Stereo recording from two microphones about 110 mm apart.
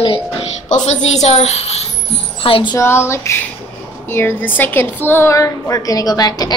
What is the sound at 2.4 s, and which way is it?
Speech, 55° left (ahead or behind).